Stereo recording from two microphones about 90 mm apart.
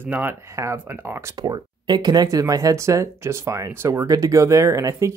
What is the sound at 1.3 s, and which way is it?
Speech, 50° right (ahead or behind).